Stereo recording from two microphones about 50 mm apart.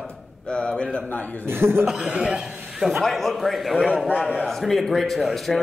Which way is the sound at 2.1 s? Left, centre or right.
Centre.